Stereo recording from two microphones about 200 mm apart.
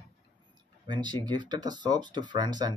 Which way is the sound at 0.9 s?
20° right (ahead or behind).